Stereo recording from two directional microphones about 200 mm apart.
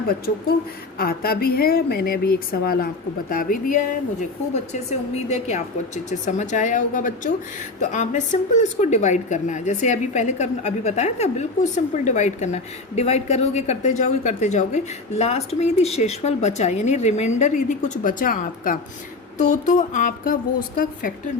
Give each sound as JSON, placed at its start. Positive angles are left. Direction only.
{"t": 0.9, "sound": "a woman's voice", "side_deg": 50}